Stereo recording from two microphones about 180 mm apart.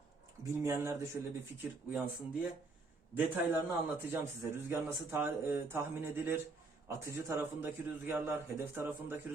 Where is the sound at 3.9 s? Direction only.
15° right (ahead or behind).